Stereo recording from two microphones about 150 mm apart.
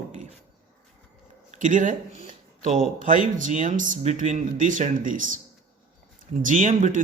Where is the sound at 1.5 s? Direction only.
55° right (ahead or behind).